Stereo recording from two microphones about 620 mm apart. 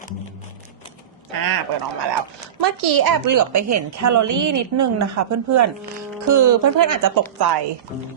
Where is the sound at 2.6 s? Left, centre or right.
Right.